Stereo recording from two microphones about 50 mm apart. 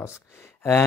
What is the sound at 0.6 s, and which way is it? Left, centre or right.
Gasp, left.